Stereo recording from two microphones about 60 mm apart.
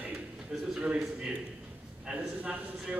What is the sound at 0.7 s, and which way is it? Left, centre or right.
Speech, centre.